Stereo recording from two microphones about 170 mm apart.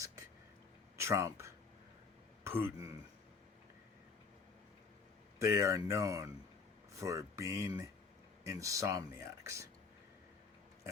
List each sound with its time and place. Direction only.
0.9 s a sound: 15° right (ahead or behind)
2.4 s speech: 15° right (ahead or behind)
5.4 s speech: 15° right (ahead or behind)